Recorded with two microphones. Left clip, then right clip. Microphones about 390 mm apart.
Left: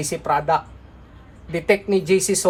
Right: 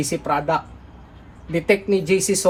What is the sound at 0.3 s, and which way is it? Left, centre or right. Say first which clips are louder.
Speech: left 2 dB; left.